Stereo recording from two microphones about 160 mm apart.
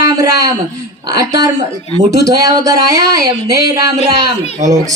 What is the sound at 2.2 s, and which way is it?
Speech, 20° right (ahead or behind).